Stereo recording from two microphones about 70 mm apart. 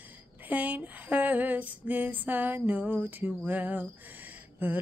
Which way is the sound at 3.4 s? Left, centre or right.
Right.